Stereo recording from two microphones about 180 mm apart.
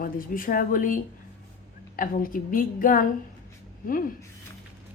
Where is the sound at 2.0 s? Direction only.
50° left (ahead or behind).